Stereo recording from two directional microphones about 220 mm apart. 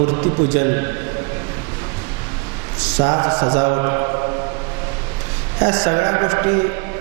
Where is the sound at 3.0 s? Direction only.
25° right (ahead or behind).